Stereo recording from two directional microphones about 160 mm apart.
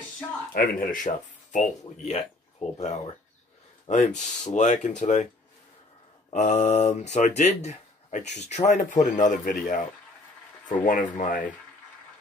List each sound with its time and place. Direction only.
0.6 s speech: 60° left (ahead or behind)
6.3 s speech: 45° left (ahead or behind)